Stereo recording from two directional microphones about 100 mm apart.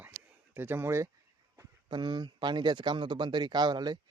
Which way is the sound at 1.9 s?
50° right (ahead or behind).